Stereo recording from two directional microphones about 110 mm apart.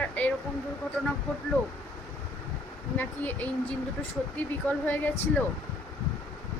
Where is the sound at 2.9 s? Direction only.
15° left (ahead or behind).